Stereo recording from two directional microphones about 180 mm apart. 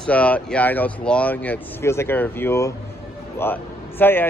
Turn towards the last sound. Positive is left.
turn(degrees=10)  # may be behind; listen again after turning